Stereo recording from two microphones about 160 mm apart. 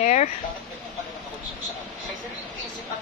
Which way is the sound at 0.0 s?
50° left (ahead or behind).